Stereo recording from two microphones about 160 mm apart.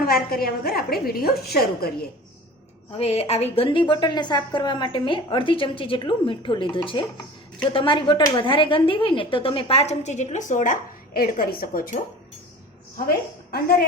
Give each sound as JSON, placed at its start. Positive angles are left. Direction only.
{"t": 0.0, "sound": "a woman's voice", "side_deg": 70}
{"t": 3.0, "sound": "a woman's voice", "side_deg": 40}
{"t": 13.1, "sound": "a woman's voice", "side_deg": 70}